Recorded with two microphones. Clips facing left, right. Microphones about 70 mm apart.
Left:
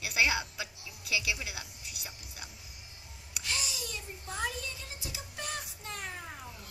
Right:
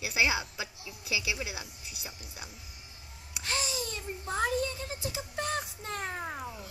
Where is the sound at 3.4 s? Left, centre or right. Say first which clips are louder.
Right 4 dB; right.